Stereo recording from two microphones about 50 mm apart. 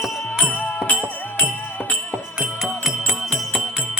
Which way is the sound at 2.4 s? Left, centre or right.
Centre.